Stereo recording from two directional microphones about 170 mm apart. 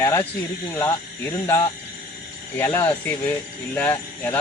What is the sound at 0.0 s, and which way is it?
Speech, 20° left (ahead or behind).